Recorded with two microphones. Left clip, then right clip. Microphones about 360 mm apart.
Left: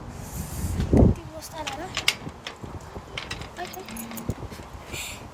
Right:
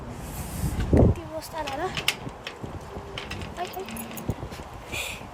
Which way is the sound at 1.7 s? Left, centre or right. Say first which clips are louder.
Left 2 dB; left.